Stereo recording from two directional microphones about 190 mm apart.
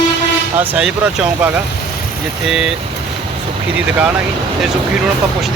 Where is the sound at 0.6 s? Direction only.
10° right (ahead or behind).